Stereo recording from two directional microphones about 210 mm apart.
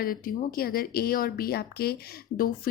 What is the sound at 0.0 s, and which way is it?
A woman's voice, 45° left (ahead or behind).